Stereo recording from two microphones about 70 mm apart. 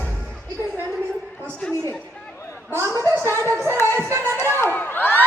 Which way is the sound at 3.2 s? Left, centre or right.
Right.